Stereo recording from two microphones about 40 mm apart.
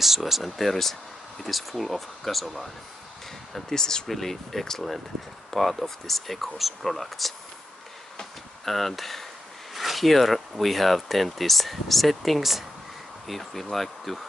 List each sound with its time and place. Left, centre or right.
0.0 s speech: centre
3.5 s speech: centre
8.6 s speech: centre
9.8 s a sound: centre
10.6 s speech: centre